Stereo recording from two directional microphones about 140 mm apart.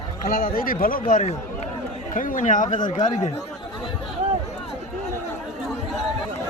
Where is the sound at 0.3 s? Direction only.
90° left; by 2.6 s 65° left (ahead or behind).